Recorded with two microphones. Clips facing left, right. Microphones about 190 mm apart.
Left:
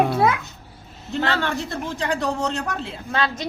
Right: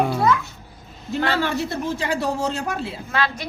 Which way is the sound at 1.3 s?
10° right (ahead or behind).